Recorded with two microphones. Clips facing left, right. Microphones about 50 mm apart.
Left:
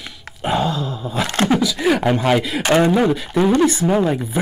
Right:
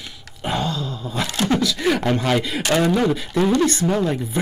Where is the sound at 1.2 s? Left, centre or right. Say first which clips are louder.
Left 4 dB; left.